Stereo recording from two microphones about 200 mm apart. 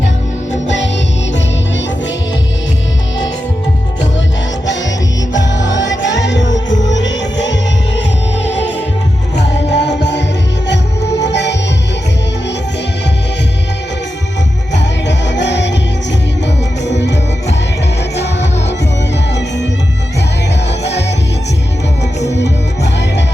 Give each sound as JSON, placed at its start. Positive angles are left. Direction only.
{"t": 5.6, "sound": "music", "side_deg": 65}
{"t": 14.8, "sound": "music", "side_deg": 60}
{"t": 16.8, "sound": "music", "side_deg": 60}
{"t": 22.3, "sound": "music", "side_deg": 60}